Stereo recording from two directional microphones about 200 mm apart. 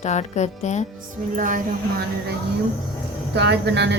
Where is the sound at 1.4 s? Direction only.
40° right (ahead or behind).